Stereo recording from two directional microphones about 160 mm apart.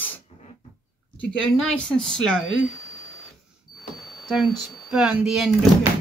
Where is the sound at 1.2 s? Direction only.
5° left (ahead or behind).